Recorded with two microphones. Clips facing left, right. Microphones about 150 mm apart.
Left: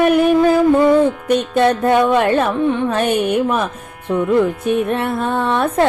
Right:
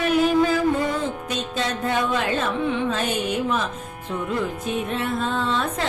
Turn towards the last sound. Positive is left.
turn(degrees=60)  # may be behind; listen again after turning